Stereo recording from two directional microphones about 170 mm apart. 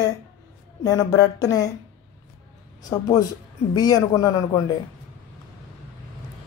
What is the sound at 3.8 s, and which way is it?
Speech, 20° left (ahead or behind).